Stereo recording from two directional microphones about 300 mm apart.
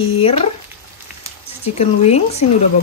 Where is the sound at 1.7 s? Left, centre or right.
Left.